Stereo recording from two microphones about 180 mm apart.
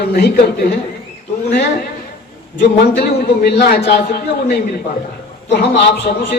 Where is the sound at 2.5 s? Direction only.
60° left (ahead or behind).